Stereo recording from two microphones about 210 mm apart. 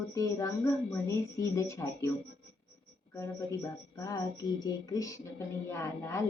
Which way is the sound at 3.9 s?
15° left (ahead or behind).